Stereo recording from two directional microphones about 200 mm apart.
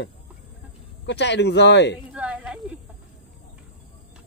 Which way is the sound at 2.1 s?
5° right (ahead or behind).